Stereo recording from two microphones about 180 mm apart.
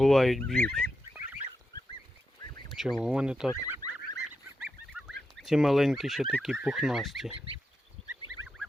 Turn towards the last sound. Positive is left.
turn(degrees=0)  # may be behind; listen again after turning